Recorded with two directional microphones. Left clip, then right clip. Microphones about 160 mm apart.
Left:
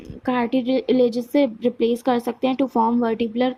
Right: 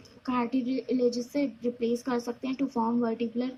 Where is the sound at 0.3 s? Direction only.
50° left (ahead or behind).